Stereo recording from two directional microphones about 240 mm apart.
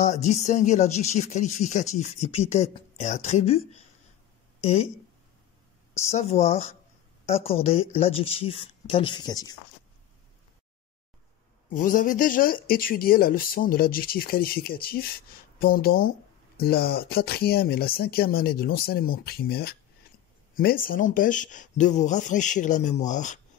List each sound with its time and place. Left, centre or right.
0.0 s speech: left
5.9 s speech: left
11.7 s speech: left